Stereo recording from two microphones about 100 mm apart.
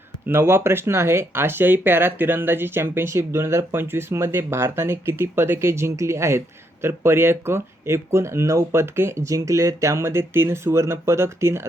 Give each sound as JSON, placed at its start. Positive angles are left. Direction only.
{"t": 0.3, "sound": "speech", "side_deg": -25}